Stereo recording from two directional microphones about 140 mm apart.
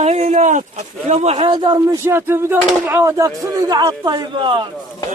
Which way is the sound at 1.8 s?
15° right (ahead or behind).